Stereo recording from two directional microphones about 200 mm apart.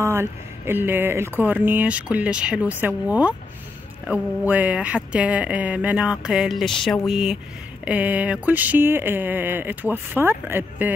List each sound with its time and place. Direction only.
0.0 s speech: 10° right (ahead or behind)